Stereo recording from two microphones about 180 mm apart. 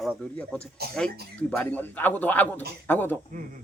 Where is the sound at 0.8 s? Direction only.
65° right (ahead or behind).